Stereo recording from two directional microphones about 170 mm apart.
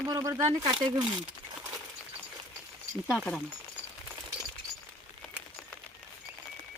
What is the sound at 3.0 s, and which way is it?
Speech, centre (ahead or behind).